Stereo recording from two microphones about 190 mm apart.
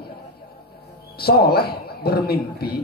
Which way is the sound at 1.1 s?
55° left (ahead or behind).